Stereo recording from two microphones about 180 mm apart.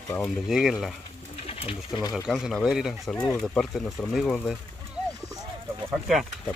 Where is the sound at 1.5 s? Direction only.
30° left (ahead or behind).